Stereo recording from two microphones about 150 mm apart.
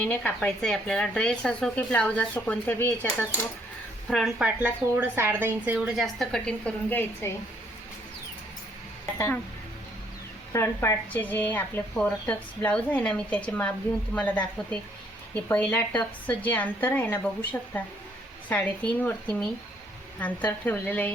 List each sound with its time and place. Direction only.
0.0 s a woman's voice: 10° left (ahead or behind)
4.1 s speech: centre (ahead or behind)
5.7 s a woman's voice: centre (ahead or behind); by 7.3 s 15° left (ahead or behind)
9.1 s speech: 15° left (ahead or behind)
10.5 s a woman's voice: 15° left (ahead or behind)